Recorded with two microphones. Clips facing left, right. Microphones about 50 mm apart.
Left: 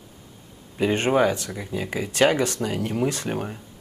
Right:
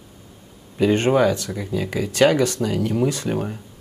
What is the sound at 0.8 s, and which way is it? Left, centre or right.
Speech, left.